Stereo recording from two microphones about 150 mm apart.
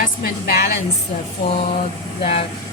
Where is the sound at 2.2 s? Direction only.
40° left (ahead or behind).